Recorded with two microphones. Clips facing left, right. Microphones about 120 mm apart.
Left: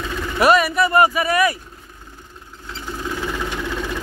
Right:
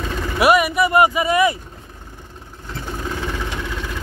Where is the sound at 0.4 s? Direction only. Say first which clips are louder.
Even; 15° right (ahead or behind).